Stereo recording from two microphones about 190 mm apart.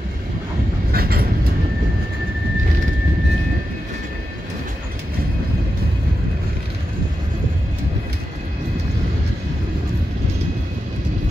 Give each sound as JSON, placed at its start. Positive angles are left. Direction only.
{"t": 0.9, "sound": "train", "side_deg": -55}